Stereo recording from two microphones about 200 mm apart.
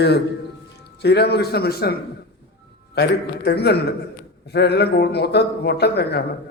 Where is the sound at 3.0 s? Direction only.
55° left (ahead or behind).